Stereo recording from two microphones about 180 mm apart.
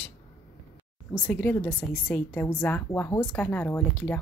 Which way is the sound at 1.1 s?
10° left (ahead or behind).